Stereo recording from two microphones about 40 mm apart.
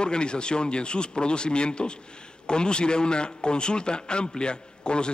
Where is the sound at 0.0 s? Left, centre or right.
Left.